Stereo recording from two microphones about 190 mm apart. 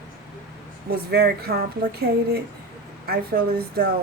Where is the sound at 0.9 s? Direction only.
55° right (ahead or behind).